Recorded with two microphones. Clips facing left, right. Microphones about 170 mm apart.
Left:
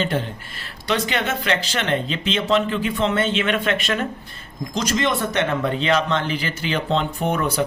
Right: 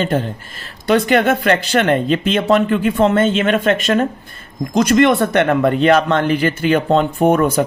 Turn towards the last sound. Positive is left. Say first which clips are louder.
# right 8 dB
turn(degrees=-50)  # may be behind; listen again after turning